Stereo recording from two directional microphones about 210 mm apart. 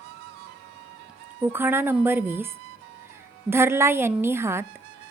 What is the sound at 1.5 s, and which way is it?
Speech, 10° right (ahead or behind).